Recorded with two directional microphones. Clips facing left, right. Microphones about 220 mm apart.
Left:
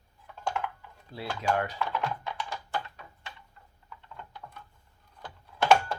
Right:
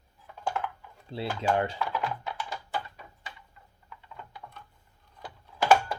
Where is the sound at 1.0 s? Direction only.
25° right (ahead or behind).